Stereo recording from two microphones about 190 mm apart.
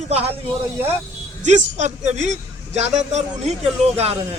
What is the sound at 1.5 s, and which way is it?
Speech, 35° right (ahead or behind).